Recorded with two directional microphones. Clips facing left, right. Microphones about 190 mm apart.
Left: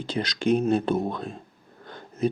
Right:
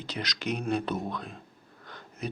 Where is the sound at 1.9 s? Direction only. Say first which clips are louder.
Left 11 dB; 25° left (ahead or behind).